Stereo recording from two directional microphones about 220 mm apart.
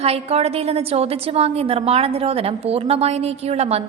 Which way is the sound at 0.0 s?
30° right (ahead or behind).